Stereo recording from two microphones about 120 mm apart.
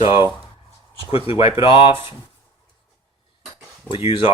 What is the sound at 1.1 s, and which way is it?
Speech, 50° left (ahead or behind).